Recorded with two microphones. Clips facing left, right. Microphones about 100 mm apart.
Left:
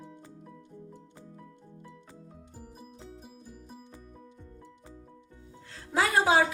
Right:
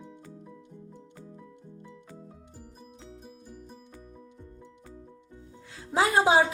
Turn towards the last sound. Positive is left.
turn(degrees=-20)  # may be behind; listen again after turning